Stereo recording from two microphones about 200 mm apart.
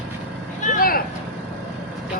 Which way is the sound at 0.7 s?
45° left (ahead or behind).